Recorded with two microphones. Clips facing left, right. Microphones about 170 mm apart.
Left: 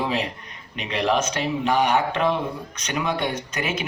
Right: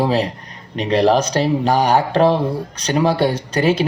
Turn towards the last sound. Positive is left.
turn(degrees=-30)  # may be behind; listen again after turning